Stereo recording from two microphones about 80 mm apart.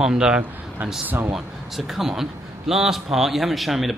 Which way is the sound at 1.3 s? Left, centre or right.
Centre.